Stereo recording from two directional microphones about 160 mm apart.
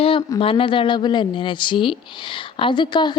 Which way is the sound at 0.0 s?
35° left (ahead or behind).